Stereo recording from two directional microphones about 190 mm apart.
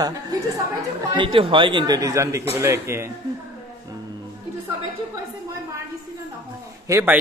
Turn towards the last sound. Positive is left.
turn(degrees=-15)  # may be behind; listen again after turning